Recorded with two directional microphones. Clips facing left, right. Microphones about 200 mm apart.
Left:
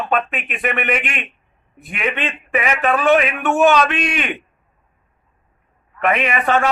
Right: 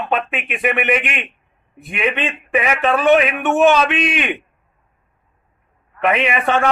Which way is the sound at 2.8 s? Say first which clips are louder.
Right 1 dB; centre (ahead or behind).